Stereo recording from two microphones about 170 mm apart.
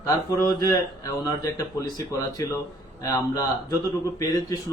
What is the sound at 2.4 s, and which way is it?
Speech, 20° left (ahead or behind).